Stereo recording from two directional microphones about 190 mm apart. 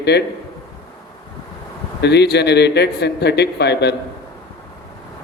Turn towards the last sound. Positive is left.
turn(degrees=60)  # may be behind; listen again after turning